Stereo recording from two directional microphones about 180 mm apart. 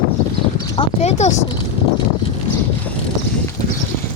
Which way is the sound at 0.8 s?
40° left (ahead or behind).